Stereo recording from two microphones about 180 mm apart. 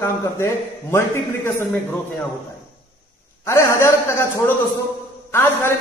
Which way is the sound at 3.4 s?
15° left (ahead or behind).